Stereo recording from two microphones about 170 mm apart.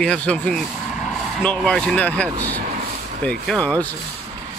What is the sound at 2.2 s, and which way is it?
Speech, 15° right (ahead or behind).